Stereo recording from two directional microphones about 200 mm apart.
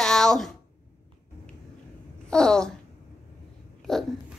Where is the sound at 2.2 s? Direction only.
5° left (ahead or behind).